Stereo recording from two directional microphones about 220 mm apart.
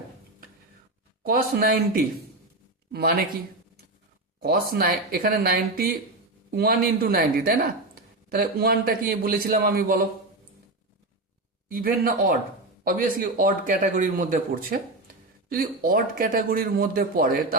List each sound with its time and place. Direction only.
1.2 s speech: 45° right (ahead or behind)
4.4 s speech: 40° right (ahead or behind)
11.7 s speech: 40° right (ahead or behind)